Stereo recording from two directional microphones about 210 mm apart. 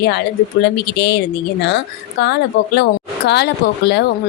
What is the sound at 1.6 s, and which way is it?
A woman's voice, 55° left (ahead or behind).